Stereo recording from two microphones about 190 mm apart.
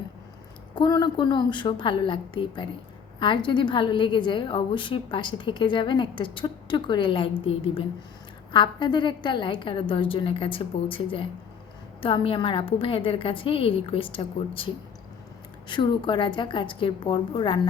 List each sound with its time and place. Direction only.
0.8 s a woman's voice: 25° left (ahead or behind)
15.7 s a woman's voice: 25° left (ahead or behind)